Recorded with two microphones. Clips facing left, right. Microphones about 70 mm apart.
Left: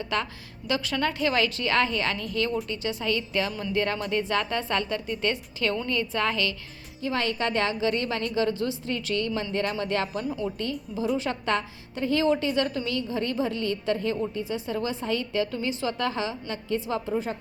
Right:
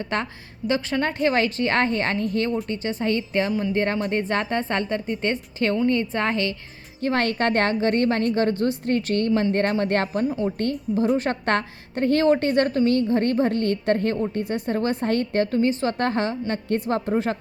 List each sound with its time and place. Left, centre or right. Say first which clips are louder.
0.0 s a woman's voice: right 2 dB; right
7.0 s a woman's voice: right 5 dB; right